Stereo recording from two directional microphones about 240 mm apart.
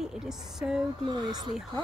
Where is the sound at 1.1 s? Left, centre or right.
Centre.